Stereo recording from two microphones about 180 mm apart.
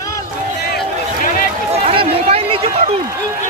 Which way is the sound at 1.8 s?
35° right (ahead or behind).